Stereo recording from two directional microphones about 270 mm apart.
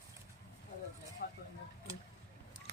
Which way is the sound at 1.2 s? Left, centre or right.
Left.